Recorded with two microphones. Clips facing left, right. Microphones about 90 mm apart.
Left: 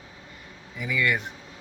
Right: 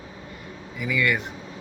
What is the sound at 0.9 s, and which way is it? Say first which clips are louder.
Speech: right 1 dB; 25° left (ahead or behind).